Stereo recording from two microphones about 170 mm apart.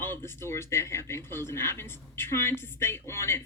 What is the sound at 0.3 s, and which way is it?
Speech, 15° left (ahead or behind).